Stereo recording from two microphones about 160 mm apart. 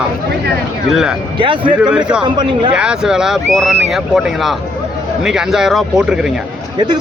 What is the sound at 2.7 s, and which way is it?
A man's voice, 5° right (ahead or behind).